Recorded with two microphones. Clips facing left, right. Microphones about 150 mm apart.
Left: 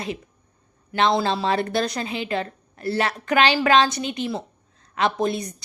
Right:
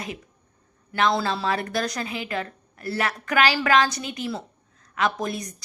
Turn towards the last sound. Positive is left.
turn(degrees=25)  # may be behind; listen again after turning